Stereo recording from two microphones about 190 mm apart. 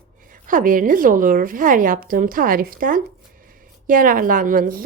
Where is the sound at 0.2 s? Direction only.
45° right (ahead or behind).